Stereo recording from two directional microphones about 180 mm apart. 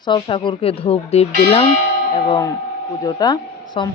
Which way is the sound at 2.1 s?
20° left (ahead or behind).